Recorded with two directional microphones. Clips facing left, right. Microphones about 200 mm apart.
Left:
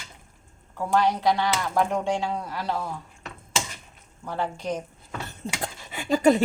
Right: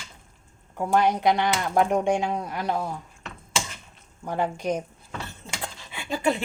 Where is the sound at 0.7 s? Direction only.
20° right (ahead or behind).